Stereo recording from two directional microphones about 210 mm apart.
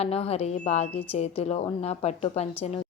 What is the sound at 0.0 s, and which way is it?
A woman's voice, 30° left (ahead or behind).